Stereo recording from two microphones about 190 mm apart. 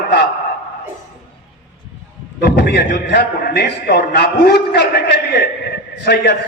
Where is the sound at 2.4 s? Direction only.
60° left (ahead or behind).